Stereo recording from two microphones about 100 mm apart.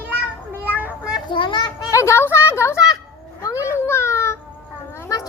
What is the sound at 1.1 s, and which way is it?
Children playing, 55° left (ahead or behind).